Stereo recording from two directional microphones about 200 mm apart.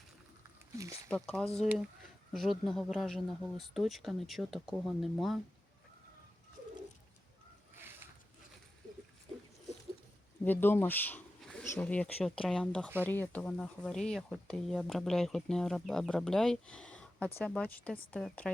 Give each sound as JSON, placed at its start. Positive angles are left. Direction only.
{"t": 0.8, "sound": "speech", "side_deg": -15}
{"t": 1.0, "sound": "speech", "side_deg": 5}
{"t": 7.8, "sound": "a sound", "side_deg": -10}
{"t": 10.4, "sound": "speech", "side_deg": 10}